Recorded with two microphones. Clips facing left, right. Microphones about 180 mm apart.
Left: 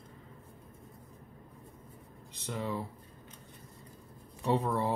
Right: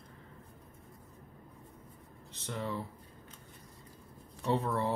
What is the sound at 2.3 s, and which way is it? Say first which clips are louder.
Speech: left 2 dB; 15° left (ahead or behind).